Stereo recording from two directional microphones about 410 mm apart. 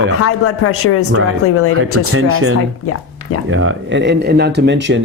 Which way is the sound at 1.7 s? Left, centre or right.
Right.